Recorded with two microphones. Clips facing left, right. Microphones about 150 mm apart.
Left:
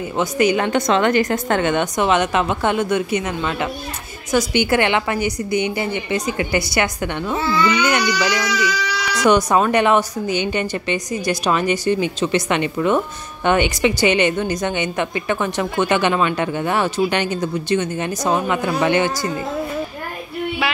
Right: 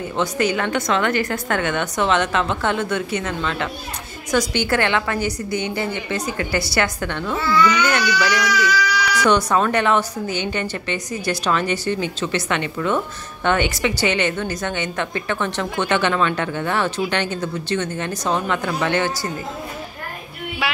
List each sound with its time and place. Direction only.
0.2 s a woman's voice: 15° left (ahead or behind)